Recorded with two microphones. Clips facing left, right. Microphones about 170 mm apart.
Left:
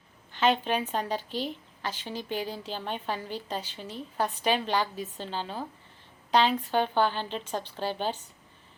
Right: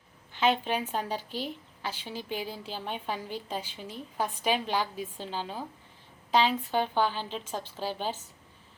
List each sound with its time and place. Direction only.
0.3 s a woman's voice: 10° right (ahead or behind)